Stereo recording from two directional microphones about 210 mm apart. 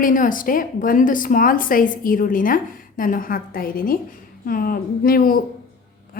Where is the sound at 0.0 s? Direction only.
40° left (ahead or behind).